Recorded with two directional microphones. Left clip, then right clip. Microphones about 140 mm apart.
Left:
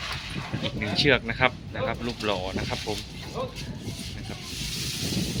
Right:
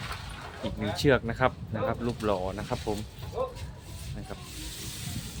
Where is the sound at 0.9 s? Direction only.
40° right (ahead or behind).